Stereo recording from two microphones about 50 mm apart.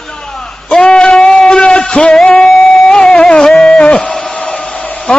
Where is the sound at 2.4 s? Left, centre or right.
Centre.